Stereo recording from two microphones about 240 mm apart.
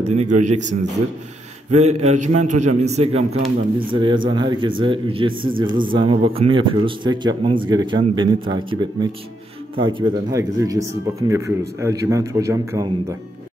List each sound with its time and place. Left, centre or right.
0.0 s a man's voice: right